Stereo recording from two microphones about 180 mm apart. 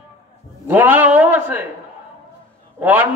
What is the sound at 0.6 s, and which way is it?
A man's voice, 10° right (ahead or behind).